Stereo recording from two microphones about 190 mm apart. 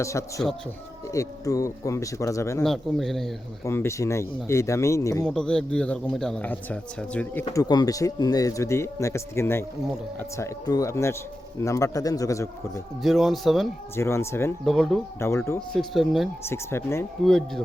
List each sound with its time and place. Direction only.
0.0 s a man's voice: 15° left (ahead or behind)
2.6 s speech: centre (ahead or behind)
3.6 s a man's voice: 15° left (ahead or behind)
5.2 s a man's voice: 5° left (ahead or behind)
13.0 s speech: centre (ahead or behind)
13.9 s a man's voice: 15° left (ahead or behind)
14.6 s speech: centre (ahead or behind)
15.2 s a man's voice: 15° left (ahead or behind)
15.8 s speech: centre (ahead or behind)
16.4 s a man's voice: 15° left (ahead or behind)
17.2 s speech: centre (ahead or behind)